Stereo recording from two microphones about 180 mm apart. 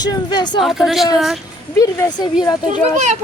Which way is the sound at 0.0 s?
25° left (ahead or behind).